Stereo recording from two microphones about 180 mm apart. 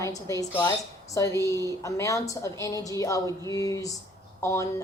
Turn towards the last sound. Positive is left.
turn(degrees=15)  # may be behind; listen again after turning